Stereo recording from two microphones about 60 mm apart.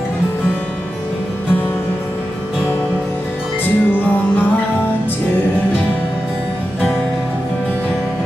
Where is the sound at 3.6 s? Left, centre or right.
Left.